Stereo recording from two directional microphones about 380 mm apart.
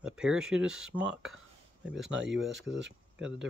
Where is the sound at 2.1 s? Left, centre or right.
Right.